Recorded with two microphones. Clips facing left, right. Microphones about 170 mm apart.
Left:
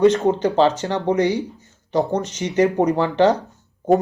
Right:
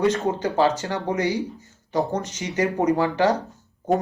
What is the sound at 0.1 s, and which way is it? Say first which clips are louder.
Speech: left 5 dB; 20° left (ahead or behind).